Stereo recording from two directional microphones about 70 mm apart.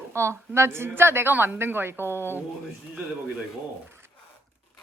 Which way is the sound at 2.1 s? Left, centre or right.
Left.